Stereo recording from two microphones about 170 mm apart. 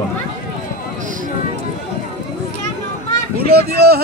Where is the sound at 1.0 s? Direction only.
50° right (ahead or behind).